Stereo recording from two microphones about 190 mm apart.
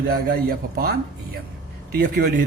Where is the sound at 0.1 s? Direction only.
50° right (ahead or behind).